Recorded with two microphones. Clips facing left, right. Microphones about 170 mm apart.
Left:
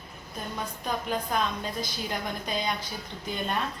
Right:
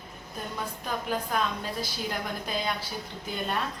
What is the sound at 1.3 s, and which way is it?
A woman's voice, 5° right (ahead or behind).